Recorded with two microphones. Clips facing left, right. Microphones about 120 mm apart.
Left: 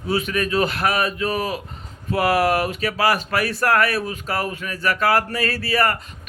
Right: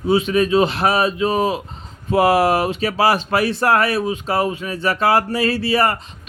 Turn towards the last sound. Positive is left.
turn(degrees=-25)  # may be behind; listen again after turning